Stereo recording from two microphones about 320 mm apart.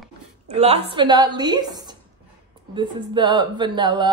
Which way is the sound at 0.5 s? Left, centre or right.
Centre.